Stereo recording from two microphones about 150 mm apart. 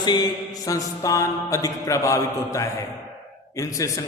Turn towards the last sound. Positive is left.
turn(degrees=20)  # may be behind; listen again after turning